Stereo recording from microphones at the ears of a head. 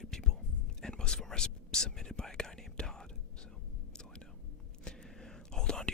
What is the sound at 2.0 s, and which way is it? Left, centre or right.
Whispering, centre.